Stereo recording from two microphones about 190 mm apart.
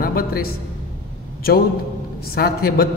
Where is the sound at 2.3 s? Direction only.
55° left (ahead or behind).